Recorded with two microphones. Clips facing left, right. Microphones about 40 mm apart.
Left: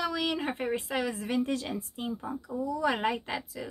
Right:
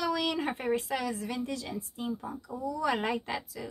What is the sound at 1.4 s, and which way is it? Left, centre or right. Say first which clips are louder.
Speech: left 4 dB; left.